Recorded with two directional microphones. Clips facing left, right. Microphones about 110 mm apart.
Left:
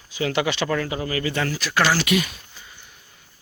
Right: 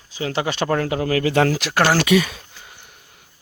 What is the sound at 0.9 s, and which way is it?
Speech, 70° right (ahead or behind).